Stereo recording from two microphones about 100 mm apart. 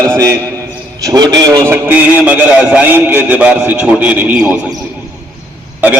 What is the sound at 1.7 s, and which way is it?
A man's voice, 20° right (ahead or behind).